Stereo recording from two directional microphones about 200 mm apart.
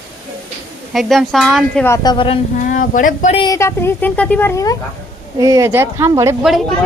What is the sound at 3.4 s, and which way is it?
A woman's voice, 15° left (ahead or behind).